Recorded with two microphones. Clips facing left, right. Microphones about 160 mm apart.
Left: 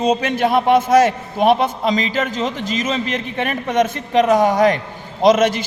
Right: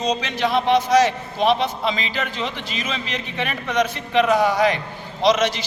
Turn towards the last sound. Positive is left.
turn(degrees=50)  # may be behind; listen again after turning